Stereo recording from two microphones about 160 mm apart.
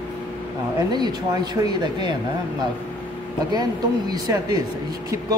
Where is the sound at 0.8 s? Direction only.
25° right (ahead or behind).